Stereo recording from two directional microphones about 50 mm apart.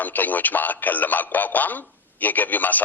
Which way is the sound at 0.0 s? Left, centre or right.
Left.